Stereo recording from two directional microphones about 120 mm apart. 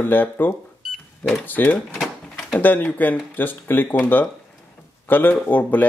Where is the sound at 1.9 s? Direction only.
5° left (ahead or behind).